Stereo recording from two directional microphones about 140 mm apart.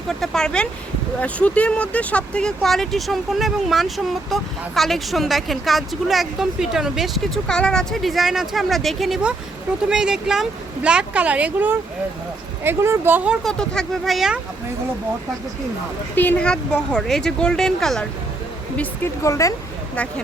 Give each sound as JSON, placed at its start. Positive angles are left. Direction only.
{"t": 0.1, "sound": "a woman's voice", "side_deg": 5}
{"t": 13.4, "sound": "speech", "side_deg": 5}
{"t": 16.1, "sound": "speech", "side_deg": 10}
{"t": 19.2, "sound": "speech", "side_deg": 20}